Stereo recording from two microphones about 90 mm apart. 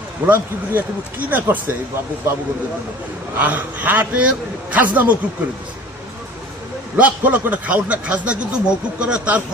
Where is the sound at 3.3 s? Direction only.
15° right (ahead or behind).